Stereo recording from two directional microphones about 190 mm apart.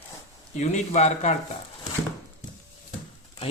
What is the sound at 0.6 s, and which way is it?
Speech, 35° left (ahead or behind).